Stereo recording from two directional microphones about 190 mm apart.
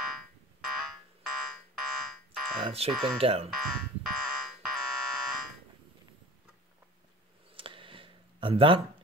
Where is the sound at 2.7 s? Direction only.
30° right (ahead or behind).